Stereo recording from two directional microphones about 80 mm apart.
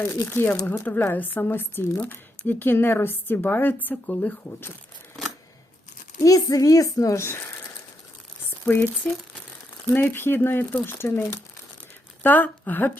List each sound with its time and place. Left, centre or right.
0.3 s speech: left
5.2 s scissors: centre
6.2 s a child's voice: left
8.4 s a sound: left
9.9 s speech: left
12.2 s speech: left